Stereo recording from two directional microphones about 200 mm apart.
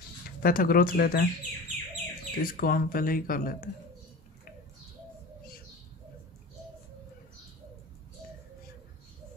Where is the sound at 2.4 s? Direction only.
45° left (ahead or behind).